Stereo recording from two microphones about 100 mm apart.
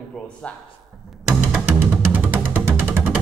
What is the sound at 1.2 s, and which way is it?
Music, 20° right (ahead or behind).